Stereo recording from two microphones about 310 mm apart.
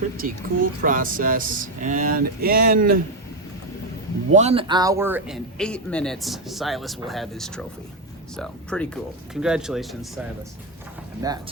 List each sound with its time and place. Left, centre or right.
0.2 s speech: right
4.3 s a man's voice: right; by 10.1 s centre
11.2 s speech: centre